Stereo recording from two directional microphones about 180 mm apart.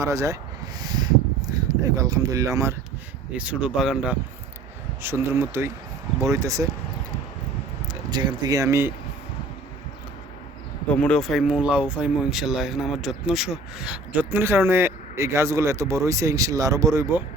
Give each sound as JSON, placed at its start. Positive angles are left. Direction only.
{"t": 0.0, "sound": "speech", "side_deg": -15}
{"t": 0.8, "sound": "a sound", "side_deg": -20}
{"t": 3.3, "sound": "speech", "side_deg": -5}
{"t": 8.1, "sound": "speech", "side_deg": -25}
{"t": 10.9, "sound": "speech", "side_deg": 5}